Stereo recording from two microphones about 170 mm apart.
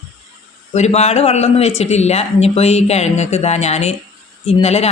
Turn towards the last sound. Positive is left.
turn(degrees=40)  # may be behind; listen again after turning